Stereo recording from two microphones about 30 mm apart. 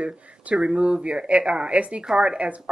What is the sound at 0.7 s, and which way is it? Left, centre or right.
A woman's voice, right.